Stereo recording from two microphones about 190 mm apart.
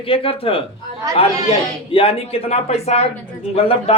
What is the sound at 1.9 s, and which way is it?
Speech, 30° left (ahead or behind).